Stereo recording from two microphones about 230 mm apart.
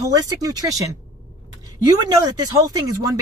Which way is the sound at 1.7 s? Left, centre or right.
Centre.